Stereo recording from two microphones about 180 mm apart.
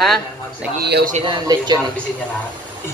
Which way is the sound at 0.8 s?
65° right (ahead or behind).